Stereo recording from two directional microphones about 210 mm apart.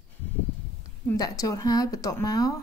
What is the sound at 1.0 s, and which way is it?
Speech, 15° left (ahead or behind).